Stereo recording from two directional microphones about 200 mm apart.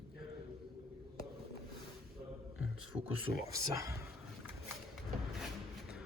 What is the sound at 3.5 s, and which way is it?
Speech, 15° right (ahead or behind).